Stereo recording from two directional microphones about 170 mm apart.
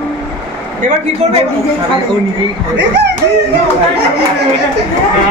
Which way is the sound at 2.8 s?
90° right.